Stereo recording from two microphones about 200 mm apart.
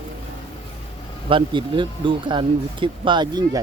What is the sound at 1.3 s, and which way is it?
Speech, 25° right (ahead or behind).